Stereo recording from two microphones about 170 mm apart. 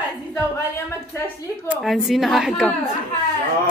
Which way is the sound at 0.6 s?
15° left (ahead or behind).